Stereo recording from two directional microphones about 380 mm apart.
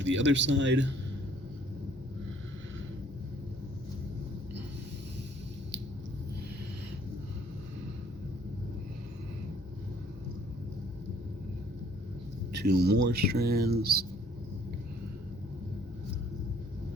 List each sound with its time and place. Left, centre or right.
0.0 s speech: right
12.5 s speech: right